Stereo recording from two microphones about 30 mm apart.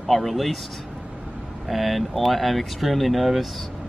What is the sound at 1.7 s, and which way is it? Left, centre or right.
Speech, centre.